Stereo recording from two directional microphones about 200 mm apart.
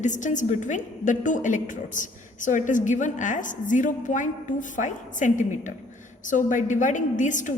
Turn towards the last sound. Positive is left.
turn(degrees=40)  # may be behind; listen again after turning